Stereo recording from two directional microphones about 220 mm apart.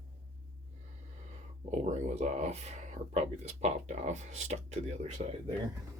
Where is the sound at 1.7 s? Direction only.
30° right (ahead or behind).